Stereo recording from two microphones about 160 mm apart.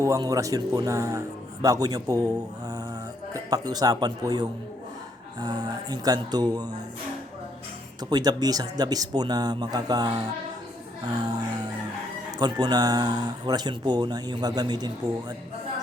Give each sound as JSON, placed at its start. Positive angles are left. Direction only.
{"t": 0.0, "sound": "speech", "side_deg": -20}
{"t": 3.3, "sound": "speech", "side_deg": -25}
{"t": 8.1, "sound": "speech", "side_deg": -25}